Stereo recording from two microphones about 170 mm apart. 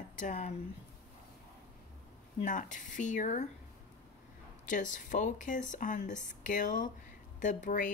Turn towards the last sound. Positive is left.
turn(degrees=50)  # may be behind; listen again after turning